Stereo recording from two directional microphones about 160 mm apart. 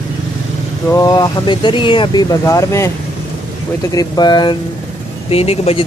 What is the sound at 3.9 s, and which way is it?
Speech, 25° left (ahead or behind).